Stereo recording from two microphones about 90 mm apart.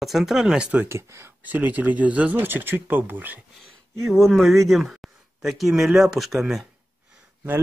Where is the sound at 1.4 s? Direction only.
15° right (ahead or behind).